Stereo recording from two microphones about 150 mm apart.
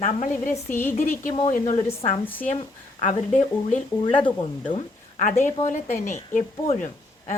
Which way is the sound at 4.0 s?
30° left (ahead or behind).